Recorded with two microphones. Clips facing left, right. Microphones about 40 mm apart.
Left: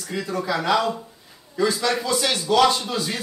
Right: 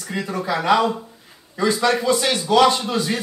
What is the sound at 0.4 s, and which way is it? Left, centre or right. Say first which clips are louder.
A man's voice: right 4 dB; centre.